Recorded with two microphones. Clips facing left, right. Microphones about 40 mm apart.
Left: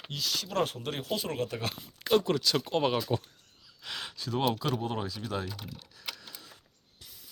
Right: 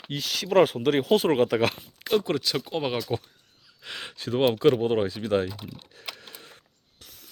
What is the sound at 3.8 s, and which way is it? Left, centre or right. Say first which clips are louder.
Speech: right 3 dB; right.